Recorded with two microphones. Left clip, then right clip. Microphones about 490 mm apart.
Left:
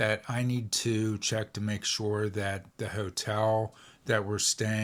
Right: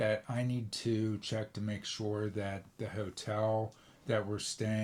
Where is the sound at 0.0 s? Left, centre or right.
Left.